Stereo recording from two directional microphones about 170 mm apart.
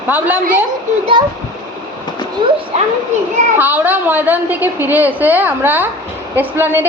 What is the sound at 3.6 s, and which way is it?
A man's voice, 10° right (ahead or behind).